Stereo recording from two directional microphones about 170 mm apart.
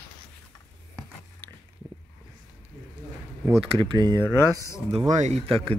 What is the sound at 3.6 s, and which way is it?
Speech, 30° right (ahead or behind).